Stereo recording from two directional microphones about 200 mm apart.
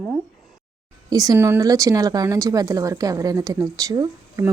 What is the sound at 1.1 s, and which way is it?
A woman's voice, 20° right (ahead or behind).